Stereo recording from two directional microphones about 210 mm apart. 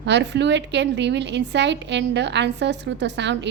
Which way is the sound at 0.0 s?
55° right (ahead or behind).